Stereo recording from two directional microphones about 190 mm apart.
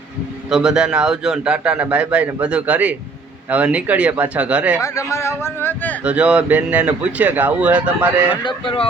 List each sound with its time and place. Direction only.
0.5 s a man's voice: 5° right (ahead or behind)
4.8 s a man's voice: 15° left (ahead or behind)
6.0 s speech: 5° right (ahead or behind)
8.4 s speech: 25° left (ahead or behind)